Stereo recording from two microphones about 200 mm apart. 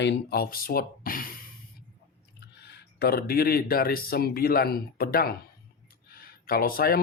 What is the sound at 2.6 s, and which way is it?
Speech, 55° left (ahead or behind).